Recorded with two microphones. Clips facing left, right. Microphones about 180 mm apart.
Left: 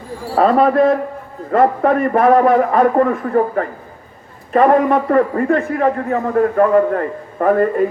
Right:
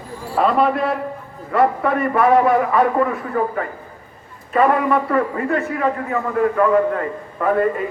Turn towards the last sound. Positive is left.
turn(degrees=45)  # may be behind; listen again after turning